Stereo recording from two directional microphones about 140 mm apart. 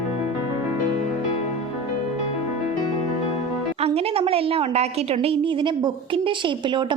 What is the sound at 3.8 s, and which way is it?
A woman's voice, 45° right (ahead or behind).